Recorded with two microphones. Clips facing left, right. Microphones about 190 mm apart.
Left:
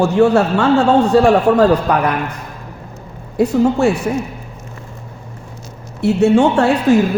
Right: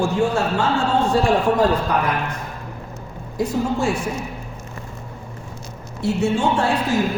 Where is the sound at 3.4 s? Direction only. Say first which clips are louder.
Left 8 dB; 65° left (ahead or behind).